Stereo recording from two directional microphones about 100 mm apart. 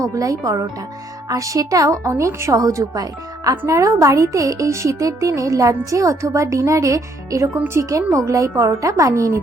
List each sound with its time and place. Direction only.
0.0 s a woman's voice: 35° right (ahead or behind)